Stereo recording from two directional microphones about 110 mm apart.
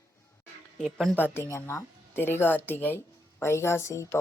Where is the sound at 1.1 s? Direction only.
20° left (ahead or behind).